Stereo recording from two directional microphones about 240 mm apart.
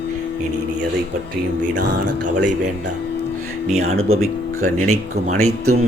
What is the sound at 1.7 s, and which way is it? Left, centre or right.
Speech, right.